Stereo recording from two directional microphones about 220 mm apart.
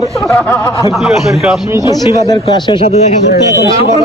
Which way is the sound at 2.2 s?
20° left (ahead or behind).